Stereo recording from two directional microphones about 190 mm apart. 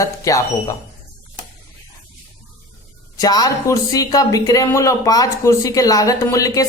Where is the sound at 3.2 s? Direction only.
20° left (ahead or behind).